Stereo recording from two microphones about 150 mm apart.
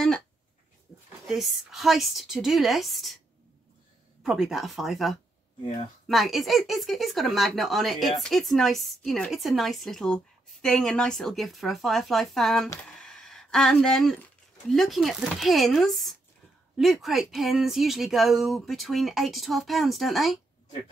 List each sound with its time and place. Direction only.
1.2 s speech: centre (ahead or behind)
4.2 s speech: centre (ahead or behind)